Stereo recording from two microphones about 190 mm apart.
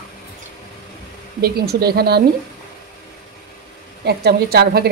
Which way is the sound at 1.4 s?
55° right (ahead or behind).